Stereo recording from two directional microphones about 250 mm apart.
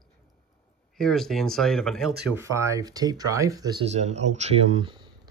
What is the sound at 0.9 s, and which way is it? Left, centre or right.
Speech, centre.